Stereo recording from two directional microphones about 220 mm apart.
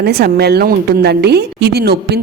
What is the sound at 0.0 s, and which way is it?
A woman's voice, 45° right (ahead or behind).